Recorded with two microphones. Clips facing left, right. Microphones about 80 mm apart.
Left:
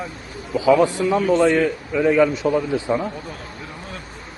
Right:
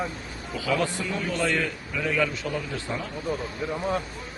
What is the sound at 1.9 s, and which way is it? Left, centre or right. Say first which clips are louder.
A man's voice: left 10 dB; left.